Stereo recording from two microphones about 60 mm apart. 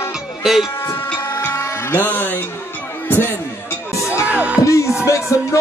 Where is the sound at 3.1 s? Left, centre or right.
Left.